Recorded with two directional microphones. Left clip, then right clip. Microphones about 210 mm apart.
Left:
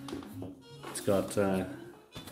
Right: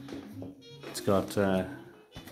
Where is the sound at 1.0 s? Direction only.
30° right (ahead or behind).